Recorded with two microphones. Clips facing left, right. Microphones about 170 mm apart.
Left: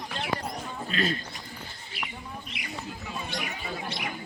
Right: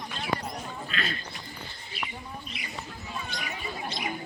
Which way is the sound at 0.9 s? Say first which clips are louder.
Left 7 dB; 40° left (ahead or behind).